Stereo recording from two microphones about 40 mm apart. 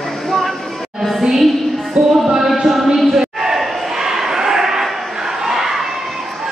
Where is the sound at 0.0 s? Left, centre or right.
Centre.